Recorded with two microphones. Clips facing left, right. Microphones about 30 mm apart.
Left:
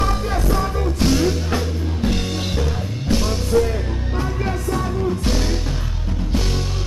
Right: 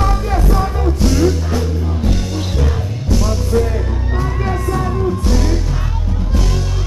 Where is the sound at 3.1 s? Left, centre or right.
Left.